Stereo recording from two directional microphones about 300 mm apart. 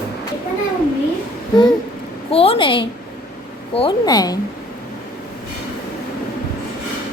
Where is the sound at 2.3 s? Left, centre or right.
Centre.